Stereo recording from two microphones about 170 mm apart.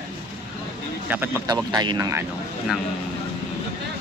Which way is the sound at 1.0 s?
10° right (ahead or behind).